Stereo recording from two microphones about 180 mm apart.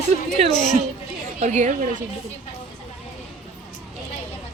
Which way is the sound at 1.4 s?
40° right (ahead or behind).